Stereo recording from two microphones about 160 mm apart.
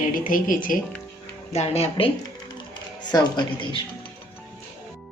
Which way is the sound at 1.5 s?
40° left (ahead or behind).